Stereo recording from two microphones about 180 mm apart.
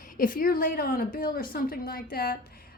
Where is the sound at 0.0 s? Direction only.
50° left (ahead or behind).